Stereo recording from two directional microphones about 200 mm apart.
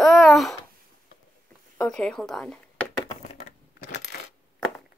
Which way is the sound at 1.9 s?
5° left (ahead or behind).